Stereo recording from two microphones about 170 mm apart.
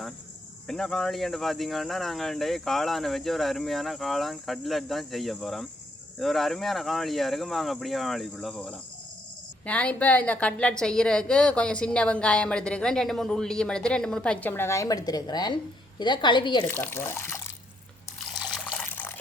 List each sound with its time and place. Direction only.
0.7 s a woman's voice: 5° left (ahead or behind); by 16.6 s 25° left (ahead or behind)
16.6 s speech: 15° left (ahead or behind)
18.2 s water: centre (ahead or behind)